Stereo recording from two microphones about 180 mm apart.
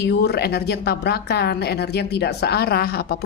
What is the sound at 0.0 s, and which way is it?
Speech, 65° left (ahead or behind).